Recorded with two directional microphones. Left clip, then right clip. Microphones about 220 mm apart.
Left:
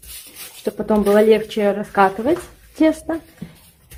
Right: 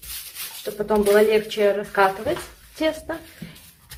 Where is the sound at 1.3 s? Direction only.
45° left (ahead or behind).